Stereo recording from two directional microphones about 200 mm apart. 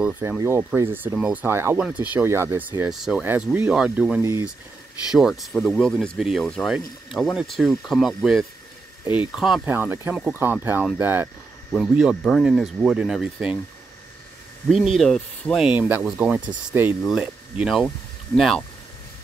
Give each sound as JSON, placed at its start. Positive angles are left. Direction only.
{"t": 0.0, "sound": "speech", "side_deg": -5}
{"t": 5.1, "sound": "speech", "side_deg": 0}
{"t": 14.7, "sound": "speech", "side_deg": 0}